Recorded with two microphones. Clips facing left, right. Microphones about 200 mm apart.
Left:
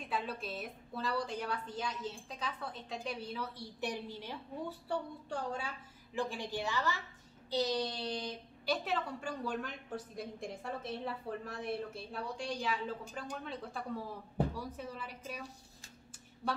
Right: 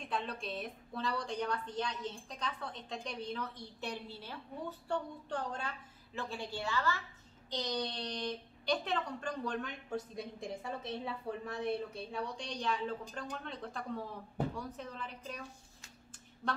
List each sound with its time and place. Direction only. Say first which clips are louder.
0.1 s a woman's voice: even; 5° left (ahead or behind)